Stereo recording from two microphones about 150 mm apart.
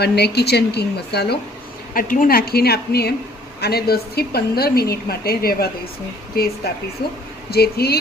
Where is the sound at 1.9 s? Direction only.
70° left (ahead or behind); by 5.7 s 90° left.